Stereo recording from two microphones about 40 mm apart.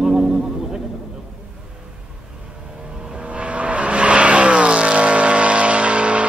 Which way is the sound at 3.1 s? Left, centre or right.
Right.